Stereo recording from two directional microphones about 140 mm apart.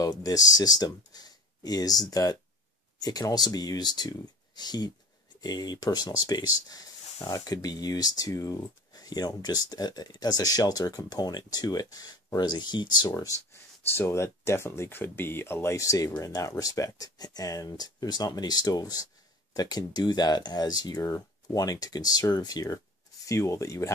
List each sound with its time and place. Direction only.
0.0 s speech: 25° left (ahead or behind)